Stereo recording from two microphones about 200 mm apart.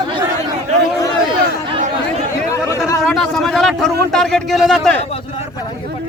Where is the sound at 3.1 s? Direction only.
5° left (ahead or behind).